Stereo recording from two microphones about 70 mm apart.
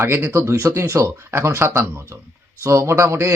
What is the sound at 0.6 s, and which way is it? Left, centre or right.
Speech, right.